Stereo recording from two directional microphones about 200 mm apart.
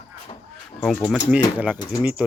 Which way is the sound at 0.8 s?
5° left (ahead or behind).